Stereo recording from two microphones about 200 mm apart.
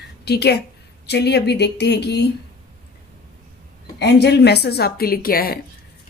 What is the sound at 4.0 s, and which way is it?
A woman's voice, 55° left (ahead or behind).